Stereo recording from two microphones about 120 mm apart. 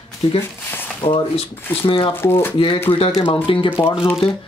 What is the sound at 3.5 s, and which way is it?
Speech, 45° left (ahead or behind).